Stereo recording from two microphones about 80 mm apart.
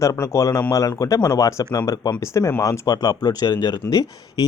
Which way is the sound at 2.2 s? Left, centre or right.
Left.